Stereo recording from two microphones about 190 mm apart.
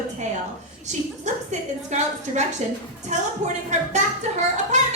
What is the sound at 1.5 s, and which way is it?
Speech, 40° right (ahead or behind).